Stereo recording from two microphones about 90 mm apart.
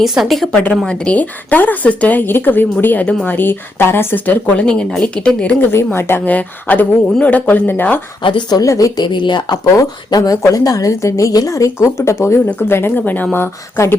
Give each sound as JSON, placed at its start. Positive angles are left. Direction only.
{"t": 0.0, "sound": "a woman's voice", "side_deg": -5}
{"t": 0.5, "sound": "speech", "side_deg": 10}
{"t": 5.7, "sound": "a woman's voice", "side_deg": 25}
{"t": 8.2, "sound": "a woman's voice", "side_deg": 65}
{"t": 8.6, "sound": "a woman's voice", "side_deg": 35}
{"t": 9.1, "sound": "a woman's voice", "side_deg": 60}
{"t": 9.7, "sound": "a woman's voice", "side_deg": 40}